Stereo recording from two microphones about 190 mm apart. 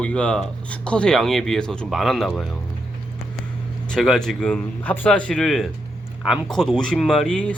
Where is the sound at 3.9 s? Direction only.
Centre (ahead or behind).